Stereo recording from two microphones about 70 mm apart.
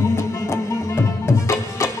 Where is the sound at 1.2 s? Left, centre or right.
Left.